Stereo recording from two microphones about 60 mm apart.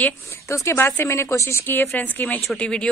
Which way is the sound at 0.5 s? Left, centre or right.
Left.